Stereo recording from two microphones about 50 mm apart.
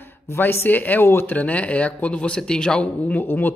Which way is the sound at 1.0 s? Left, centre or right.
Left.